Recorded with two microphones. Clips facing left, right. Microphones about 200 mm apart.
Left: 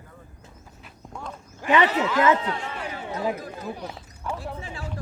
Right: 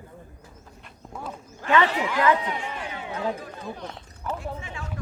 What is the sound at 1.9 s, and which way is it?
Speech, 15° right (ahead or behind).